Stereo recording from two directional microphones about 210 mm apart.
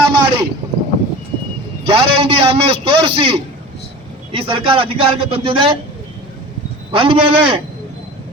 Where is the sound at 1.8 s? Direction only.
25° right (ahead or behind).